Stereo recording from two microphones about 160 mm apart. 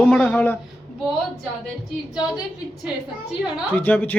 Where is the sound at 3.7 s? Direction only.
10° left (ahead or behind).